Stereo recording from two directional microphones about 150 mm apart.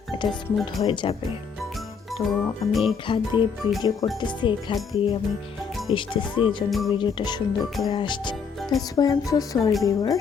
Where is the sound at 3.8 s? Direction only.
25° left (ahead or behind).